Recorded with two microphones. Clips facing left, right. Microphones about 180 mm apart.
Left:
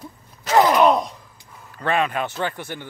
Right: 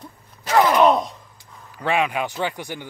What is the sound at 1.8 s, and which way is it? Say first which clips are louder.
Speech: even; 10° right (ahead or behind).